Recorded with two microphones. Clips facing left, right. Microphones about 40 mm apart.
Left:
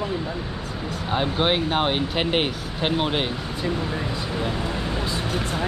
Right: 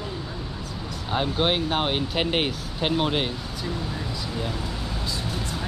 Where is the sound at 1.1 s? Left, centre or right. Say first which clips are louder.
Left 1 dB; centre.